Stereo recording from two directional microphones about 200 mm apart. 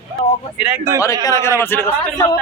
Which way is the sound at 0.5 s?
5° right (ahead or behind).